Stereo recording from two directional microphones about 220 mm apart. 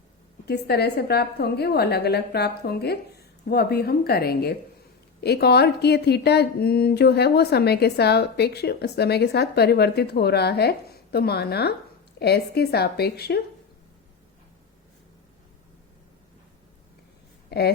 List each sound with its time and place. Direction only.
0.4 s speech: 50° left (ahead or behind)
17.5 s speech: 45° left (ahead or behind)